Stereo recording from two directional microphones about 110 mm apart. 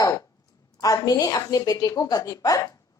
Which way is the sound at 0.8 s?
35° left (ahead or behind).